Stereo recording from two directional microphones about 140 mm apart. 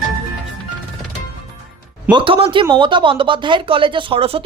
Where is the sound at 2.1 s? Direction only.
40° right (ahead or behind).